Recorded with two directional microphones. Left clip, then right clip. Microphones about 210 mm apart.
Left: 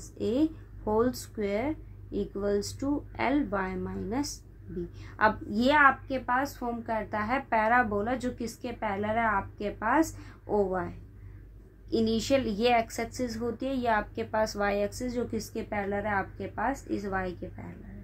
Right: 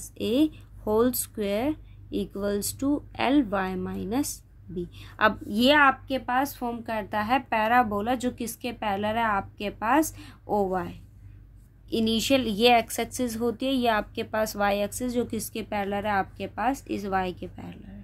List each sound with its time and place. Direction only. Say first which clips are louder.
0.2 s a woman's voice: right 3 dB; 40° right (ahead or behind)